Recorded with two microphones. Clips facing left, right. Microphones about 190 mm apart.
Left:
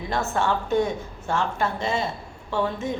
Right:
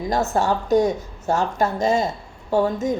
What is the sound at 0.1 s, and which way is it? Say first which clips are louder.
A woman's voice: right 3 dB; 40° right (ahead or behind).